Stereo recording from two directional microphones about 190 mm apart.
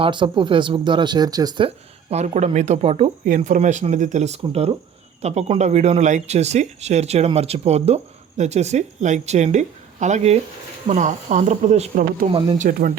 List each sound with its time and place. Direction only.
0.0 s speech: 25° right (ahead or behind); by 12.9 s 45° right (ahead or behind)